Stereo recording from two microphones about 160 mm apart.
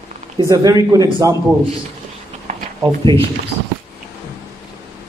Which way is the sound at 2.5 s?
50° right (ahead or behind).